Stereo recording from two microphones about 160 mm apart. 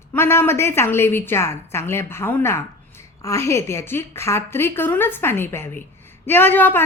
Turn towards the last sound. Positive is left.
turn(degrees=10)  # may be behind; listen again after turning